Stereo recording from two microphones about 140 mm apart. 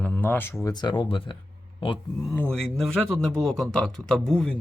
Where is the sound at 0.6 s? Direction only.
30° left (ahead or behind).